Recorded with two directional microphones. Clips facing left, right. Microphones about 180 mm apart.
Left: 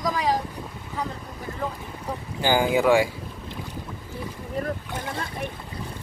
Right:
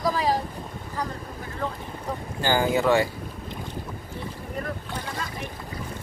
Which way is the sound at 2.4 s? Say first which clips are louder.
Left 2 dB; 15° left (ahead or behind).